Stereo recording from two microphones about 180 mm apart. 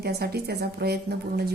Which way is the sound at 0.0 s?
65° right (ahead or behind).